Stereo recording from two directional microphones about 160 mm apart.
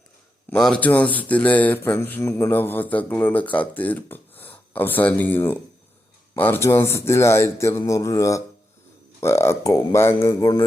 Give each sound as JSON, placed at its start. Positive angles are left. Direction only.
{"t": 0.5, "sound": "speech", "side_deg": 5}